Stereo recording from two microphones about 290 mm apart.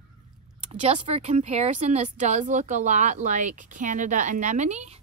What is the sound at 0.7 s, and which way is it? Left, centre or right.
Speech, right.